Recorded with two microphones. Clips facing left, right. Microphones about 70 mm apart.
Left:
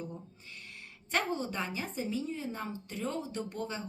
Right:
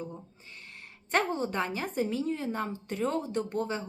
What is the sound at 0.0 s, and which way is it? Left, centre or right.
A woman's voice, right.